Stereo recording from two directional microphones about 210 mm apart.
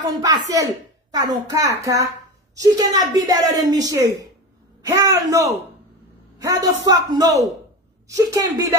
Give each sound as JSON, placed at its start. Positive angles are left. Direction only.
{"t": 0.0, "sound": "a man's voice", "side_deg": -20}